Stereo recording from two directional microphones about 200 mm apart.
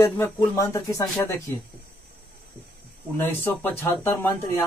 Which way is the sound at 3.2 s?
10° left (ahead or behind).